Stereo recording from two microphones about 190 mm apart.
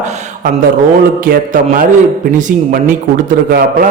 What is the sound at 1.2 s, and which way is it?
A man's voice, 45° right (ahead or behind).